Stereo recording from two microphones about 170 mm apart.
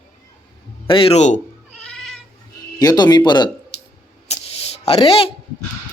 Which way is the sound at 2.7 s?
25° left (ahead or behind).